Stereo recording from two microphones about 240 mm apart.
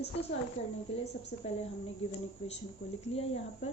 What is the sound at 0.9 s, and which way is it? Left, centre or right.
Speech, left.